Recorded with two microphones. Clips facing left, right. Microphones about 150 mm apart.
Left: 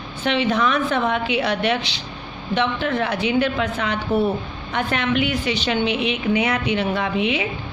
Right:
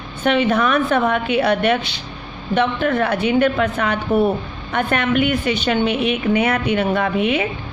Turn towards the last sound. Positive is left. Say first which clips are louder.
# right 3 dB
turn(degrees=-55)  # may be behind; listen again after turning